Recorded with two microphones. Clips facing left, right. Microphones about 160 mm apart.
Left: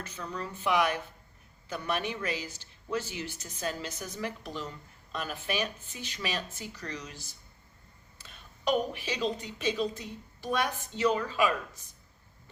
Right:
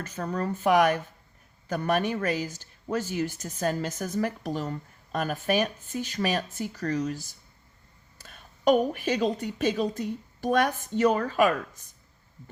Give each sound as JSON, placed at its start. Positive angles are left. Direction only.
{"t": 0.0, "sound": "a woman's voice", "side_deg": -50}
{"t": 8.2, "sound": "a woman's voice", "side_deg": -45}